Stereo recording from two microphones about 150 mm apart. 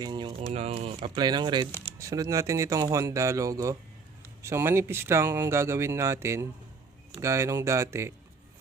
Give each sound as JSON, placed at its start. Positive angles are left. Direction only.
{"t": 0.0, "sound": "speech", "side_deg": -30}
{"t": 1.1, "sound": "speech", "side_deg": -30}